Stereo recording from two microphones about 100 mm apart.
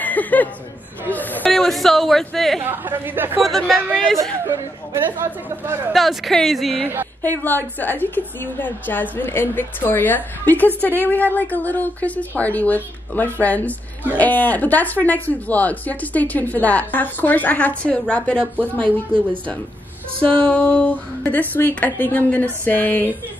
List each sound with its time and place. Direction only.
0.0 s chuckle: 15° left (ahead or behind)
1.1 s speech: 15° left (ahead or behind)
1.5 s speech: 5° left (ahead or behind)
2.6 s speech: 20° right (ahead or behind)
3.4 s speech: centre (ahead or behind)
4.5 s speech: 25° right (ahead or behind)
5.9 s speech: centre (ahead or behind)
7.2 s a woman's voice: 20° left (ahead or behind)
20.4 s speech: 10° left (ahead or behind)